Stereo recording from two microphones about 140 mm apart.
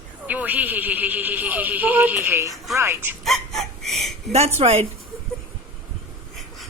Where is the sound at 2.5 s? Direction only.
Centre (ahead or behind).